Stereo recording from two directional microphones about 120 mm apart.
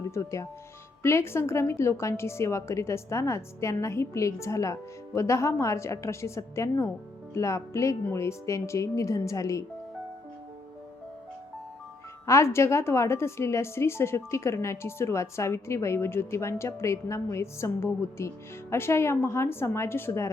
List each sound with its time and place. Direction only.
0.1 s speech: 25° left (ahead or behind)
12.2 s speech: 25° left (ahead or behind)